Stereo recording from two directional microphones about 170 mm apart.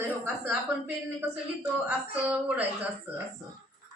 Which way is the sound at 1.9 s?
5° right (ahead or behind).